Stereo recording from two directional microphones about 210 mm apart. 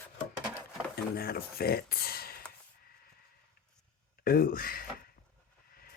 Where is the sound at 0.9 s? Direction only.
45° left (ahead or behind).